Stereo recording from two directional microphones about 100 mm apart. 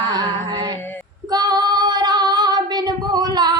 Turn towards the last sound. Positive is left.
turn(degrees=-45)  # may be behind; listen again after turning